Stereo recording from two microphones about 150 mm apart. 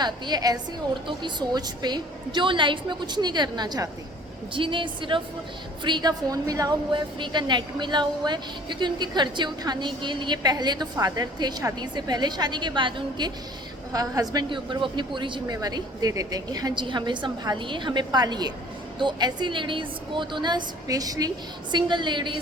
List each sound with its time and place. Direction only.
0.0 s a woman's voice: 25° right (ahead or behind)